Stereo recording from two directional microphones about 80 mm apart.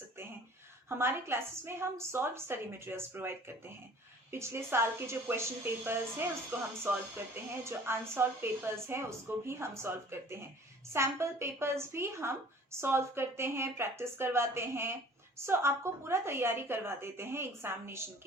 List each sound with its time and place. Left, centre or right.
0.9 s a woman's voice: right